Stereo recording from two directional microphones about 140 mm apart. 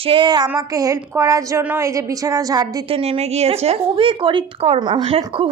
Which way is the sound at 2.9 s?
45° right (ahead or behind).